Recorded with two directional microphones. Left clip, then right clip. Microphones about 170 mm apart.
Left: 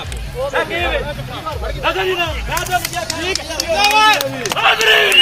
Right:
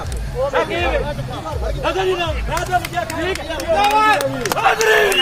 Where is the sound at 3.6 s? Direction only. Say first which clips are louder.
Left 2 dB; 45° right (ahead or behind); by 5.1 s 60° right (ahead or behind).